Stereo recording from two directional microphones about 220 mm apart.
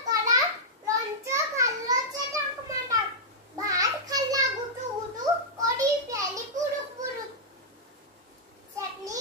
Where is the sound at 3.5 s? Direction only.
15° right (ahead or behind).